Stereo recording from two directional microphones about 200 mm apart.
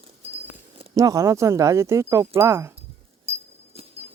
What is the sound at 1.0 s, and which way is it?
Speech, 15° right (ahead or behind).